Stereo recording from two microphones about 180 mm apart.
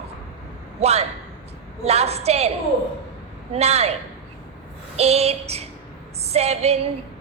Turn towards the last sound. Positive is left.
turn(degrees=-35)  # may be behind; listen again after turning